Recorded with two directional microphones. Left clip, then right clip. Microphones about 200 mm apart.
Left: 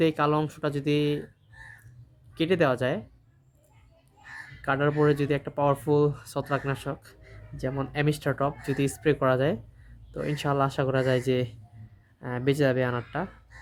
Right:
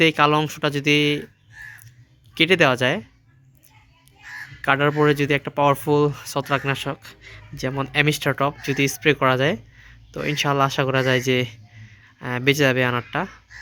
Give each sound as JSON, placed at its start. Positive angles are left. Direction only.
{"t": 0.0, "sound": "speech", "side_deg": -15}
{"t": 2.3, "sound": "speech", "side_deg": -15}
{"t": 4.6, "sound": "speech", "side_deg": -15}